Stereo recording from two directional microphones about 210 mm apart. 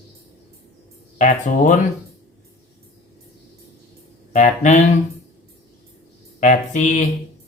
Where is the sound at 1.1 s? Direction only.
35° left (ahead or behind).